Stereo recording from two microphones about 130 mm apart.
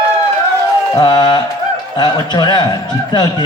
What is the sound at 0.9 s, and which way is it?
A man's voice, 35° left (ahead or behind).